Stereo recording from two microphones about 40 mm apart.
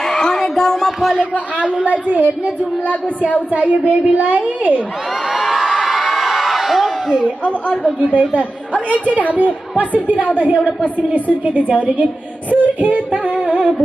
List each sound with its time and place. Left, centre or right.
0.0 s a sound: centre
2.0 s a woman's voice: right
3.5 s a woman's voice: right
5.3 s a sound: centre
5.8 s crowd: centre
8.0 s a woman's voice: right